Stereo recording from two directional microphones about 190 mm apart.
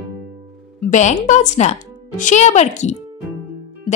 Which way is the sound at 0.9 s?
40° left (ahead or behind).